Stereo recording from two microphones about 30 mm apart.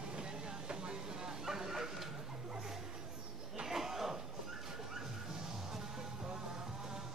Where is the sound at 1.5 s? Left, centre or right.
Centre.